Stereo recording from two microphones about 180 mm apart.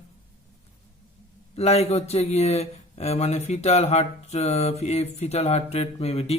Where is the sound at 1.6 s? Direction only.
35° left (ahead or behind).